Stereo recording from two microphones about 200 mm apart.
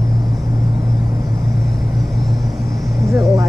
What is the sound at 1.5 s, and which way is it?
Vehicle, centre (ahead or behind).